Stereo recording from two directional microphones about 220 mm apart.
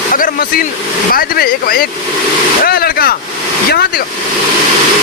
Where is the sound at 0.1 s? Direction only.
40° left (ahead or behind).